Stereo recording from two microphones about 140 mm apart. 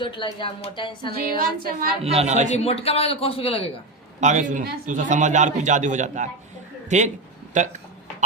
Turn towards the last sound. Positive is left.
turn(degrees=-60)  # may be behind; listen again after turning